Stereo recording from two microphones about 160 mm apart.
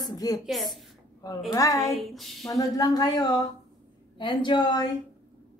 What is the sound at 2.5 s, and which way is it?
A woman's voice, 25° left (ahead or behind).